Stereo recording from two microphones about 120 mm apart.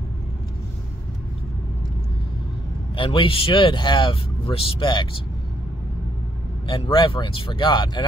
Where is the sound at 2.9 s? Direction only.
45° left (ahead or behind).